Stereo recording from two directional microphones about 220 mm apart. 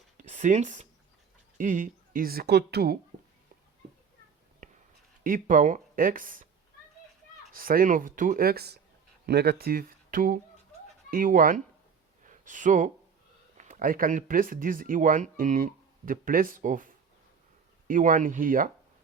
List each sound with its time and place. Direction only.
0.2 s speech: 35° right (ahead or behind)
4.6 s a sound: 35° right (ahead or behind)
5.2 s speech: 40° right (ahead or behind)
7.5 s speech: 40° right (ahead or behind)
12.2 s a sound: 35° right (ahead or behind)
13.6 s speech: 35° right (ahead or behind)